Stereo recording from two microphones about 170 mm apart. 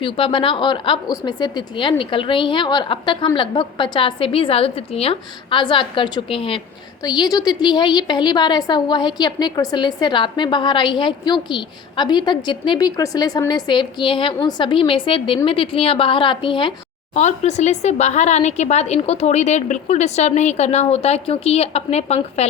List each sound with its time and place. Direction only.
0.0 s a woman's voice: 30° left (ahead or behind)
17.2 s speech: 45° left (ahead or behind)